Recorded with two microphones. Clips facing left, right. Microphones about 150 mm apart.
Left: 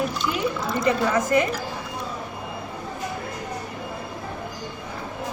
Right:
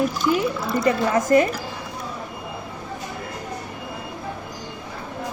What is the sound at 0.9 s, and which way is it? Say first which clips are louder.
Speech: right 3 dB; 45° right (ahead or behind).